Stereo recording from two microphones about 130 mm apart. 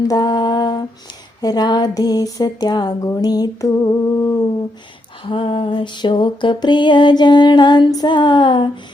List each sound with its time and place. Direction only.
0.0 s lullaby: 30° left (ahead or behind)
5.2 s lullaby: 40° left (ahead or behind)